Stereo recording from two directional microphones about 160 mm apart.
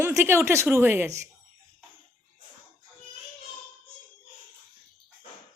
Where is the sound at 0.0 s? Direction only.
15° right (ahead or behind).